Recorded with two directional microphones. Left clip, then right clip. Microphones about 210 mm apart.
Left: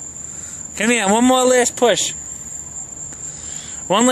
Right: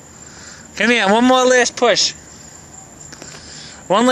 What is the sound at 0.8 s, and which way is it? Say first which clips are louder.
Speech: right 3 dB; 10° left (ahead or behind).